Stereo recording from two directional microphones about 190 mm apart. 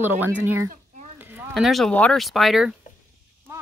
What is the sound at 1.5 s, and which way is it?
Speech, centre (ahead or behind).